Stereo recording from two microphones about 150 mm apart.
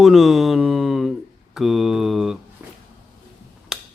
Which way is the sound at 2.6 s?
10° right (ahead or behind).